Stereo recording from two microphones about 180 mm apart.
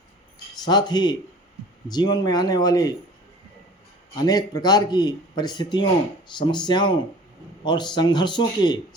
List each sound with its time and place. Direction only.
0.6 s a man's voice: 25° left (ahead or behind)
4.1 s a man's voice: 20° left (ahead or behind)